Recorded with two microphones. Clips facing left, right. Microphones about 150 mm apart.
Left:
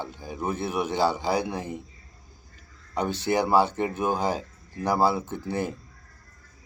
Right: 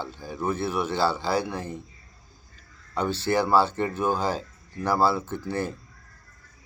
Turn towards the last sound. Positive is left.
turn(degrees=20)  # may be behind; listen again after turning